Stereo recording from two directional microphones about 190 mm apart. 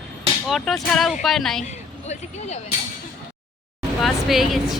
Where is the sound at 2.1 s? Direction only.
35° left (ahead or behind).